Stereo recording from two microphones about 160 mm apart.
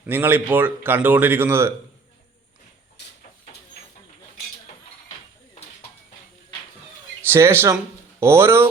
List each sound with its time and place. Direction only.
0.0 s speech: 15° right (ahead or behind)
7.2 s speech: 15° right (ahead or behind)